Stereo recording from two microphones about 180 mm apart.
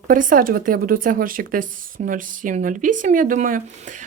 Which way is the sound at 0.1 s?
50° right (ahead or behind).